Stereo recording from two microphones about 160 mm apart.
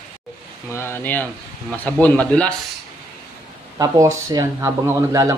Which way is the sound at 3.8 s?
20° right (ahead or behind).